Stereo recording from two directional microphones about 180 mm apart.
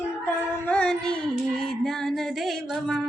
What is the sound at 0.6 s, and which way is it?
Music, 10° left (ahead or behind).